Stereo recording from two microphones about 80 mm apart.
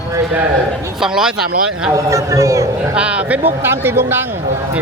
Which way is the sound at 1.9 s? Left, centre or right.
Right.